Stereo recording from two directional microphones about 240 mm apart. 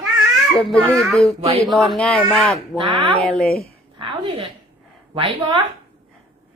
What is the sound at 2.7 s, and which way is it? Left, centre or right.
Speech, centre.